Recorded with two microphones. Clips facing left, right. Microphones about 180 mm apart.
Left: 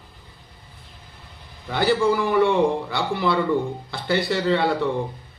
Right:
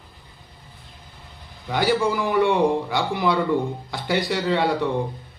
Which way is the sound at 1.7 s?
15° right (ahead or behind).